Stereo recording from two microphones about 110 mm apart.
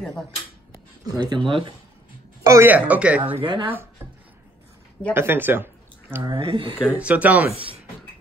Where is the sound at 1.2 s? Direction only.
50° right (ahead or behind).